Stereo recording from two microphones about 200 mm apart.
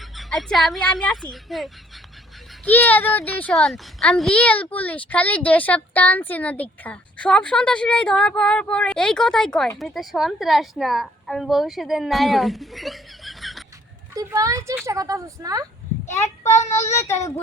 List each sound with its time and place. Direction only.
0.0 s a child's voice: centre (ahead or behind)
14.2 s a woman's voice: 15° right (ahead or behind)
16.7 s a child's voice: 15° left (ahead or behind)